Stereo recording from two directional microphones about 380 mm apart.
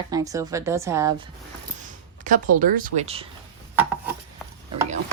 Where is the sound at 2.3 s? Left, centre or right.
Centre.